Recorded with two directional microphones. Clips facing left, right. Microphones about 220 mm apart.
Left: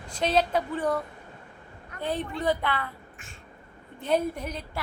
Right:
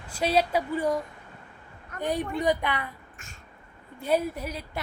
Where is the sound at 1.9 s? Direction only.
45° right (ahead or behind).